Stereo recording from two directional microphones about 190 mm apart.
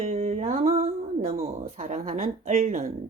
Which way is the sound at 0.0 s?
35° right (ahead or behind).